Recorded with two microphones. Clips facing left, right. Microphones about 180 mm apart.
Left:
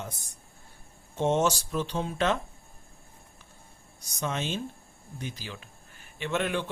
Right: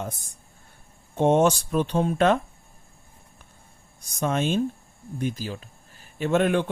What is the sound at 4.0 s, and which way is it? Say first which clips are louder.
A man's voice: right 7 dB; 55° right (ahead or behind).